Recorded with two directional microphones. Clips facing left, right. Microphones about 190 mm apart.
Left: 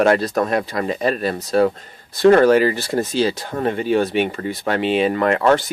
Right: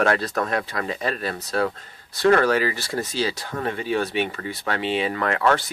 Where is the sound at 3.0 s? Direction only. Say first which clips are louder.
Left 6 dB; 55° left (ahead or behind).